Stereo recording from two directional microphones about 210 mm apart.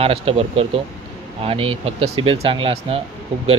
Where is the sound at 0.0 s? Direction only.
30° right (ahead or behind).